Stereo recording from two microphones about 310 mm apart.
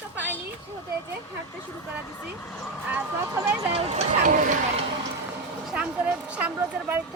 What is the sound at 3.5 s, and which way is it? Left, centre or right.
Speech, centre.